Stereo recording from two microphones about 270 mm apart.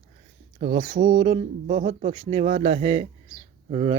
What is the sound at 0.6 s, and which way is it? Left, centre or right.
Speech, right.